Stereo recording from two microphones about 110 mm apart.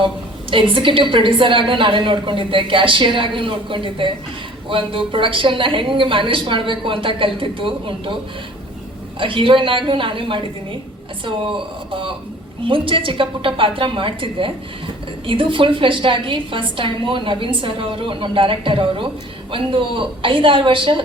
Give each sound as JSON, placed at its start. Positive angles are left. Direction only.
{"t": 0.5, "sound": "a woman's voice", "side_deg": -50}